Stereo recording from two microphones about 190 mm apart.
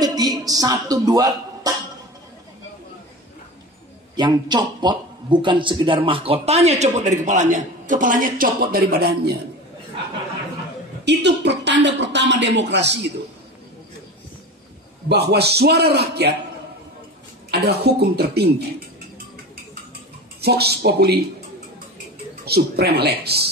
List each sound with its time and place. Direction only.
0.0 s a woman's voice: 20° right (ahead or behind)
4.2 s a man's voice: 20° right (ahead or behind); by 9.3 s 55° right (ahead or behind)
11.1 s a woman's voice: 65° right (ahead or behind)
15.0 s a woman's voice: 60° right (ahead or behind)
17.5 s a woman's voice: 60° right (ahead or behind)
20.3 s a woman's voice: 55° right (ahead or behind)
22.4 s a woman's voice: 55° right (ahead or behind)